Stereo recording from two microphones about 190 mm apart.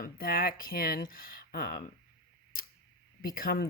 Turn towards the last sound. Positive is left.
turn(degrees=50)  # may be behind; listen again after turning